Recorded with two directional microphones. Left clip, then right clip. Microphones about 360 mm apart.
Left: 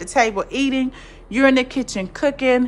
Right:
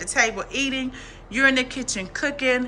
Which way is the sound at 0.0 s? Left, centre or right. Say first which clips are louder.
Left 4 dB; centre.